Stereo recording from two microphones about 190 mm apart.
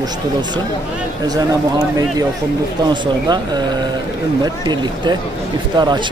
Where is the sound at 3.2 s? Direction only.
20° right (ahead or behind).